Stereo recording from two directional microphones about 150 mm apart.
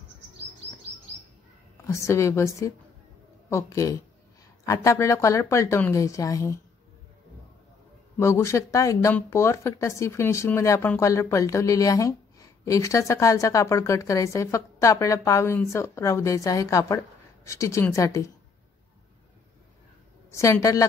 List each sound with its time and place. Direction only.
1.9 s a woman's voice: 20° left (ahead or behind)
8.2 s a woman's voice: 20° left (ahead or behind)
20.2 s a woman's voice: 20° left (ahead or behind)